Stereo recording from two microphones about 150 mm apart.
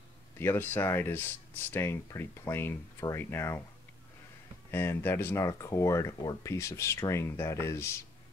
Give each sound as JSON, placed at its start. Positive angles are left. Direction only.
{"t": 0.4, "sound": "speech", "side_deg": 15}
{"t": 4.6, "sound": "speech", "side_deg": 15}